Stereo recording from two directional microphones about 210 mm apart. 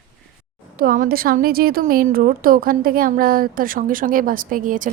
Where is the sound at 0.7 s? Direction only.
40° right (ahead or behind).